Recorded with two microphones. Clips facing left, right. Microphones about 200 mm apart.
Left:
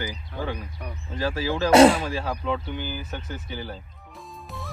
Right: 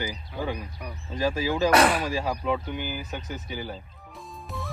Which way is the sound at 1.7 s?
25° left (ahead or behind).